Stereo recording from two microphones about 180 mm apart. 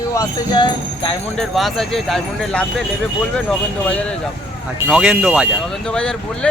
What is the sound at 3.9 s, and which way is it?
Speech, 5° left (ahead or behind).